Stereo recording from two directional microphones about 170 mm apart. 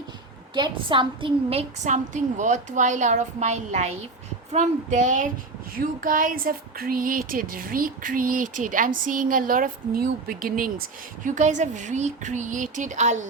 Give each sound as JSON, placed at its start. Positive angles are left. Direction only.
{"t": 0.5, "sound": "a woman's voice", "side_deg": -30}